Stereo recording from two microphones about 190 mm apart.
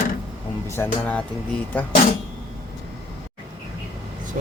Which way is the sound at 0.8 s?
5° left (ahead or behind).